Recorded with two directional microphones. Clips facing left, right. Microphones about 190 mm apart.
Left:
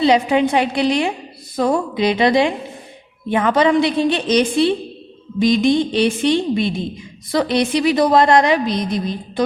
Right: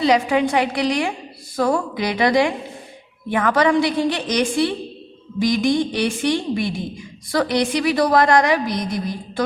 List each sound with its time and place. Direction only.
0.0 s a woman's voice: 25° left (ahead or behind)